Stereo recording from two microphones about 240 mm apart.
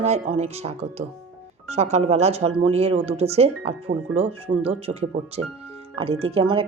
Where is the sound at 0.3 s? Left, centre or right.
Right.